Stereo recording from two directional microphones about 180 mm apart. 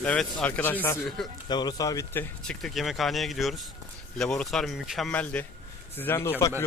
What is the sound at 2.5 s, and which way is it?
Speech, 5° left (ahead or behind).